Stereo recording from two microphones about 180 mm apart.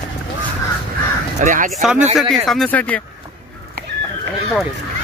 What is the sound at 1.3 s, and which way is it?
Speech, 45° right (ahead or behind).